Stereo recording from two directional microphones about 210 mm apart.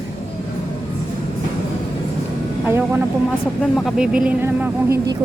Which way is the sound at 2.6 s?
10° right (ahead or behind).